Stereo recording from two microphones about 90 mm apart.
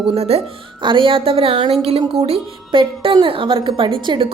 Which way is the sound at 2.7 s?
70° right (ahead or behind).